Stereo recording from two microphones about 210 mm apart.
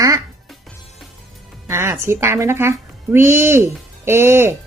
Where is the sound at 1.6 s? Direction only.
10° right (ahead or behind).